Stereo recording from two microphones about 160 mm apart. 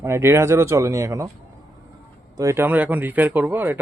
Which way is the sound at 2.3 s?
20° right (ahead or behind).